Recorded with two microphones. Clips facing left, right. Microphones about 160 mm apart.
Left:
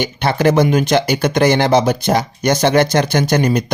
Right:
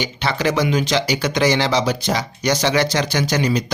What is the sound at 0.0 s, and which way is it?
Speech, 55° left (ahead or behind).